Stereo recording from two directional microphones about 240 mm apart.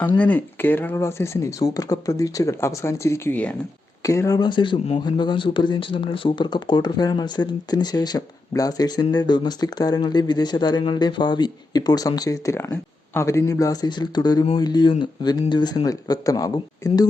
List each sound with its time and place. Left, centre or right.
0.2 s speech: centre